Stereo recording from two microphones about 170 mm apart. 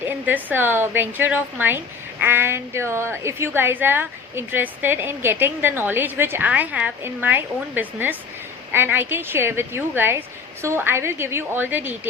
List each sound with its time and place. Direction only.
0.0 s a woman's voice: 10° right (ahead or behind)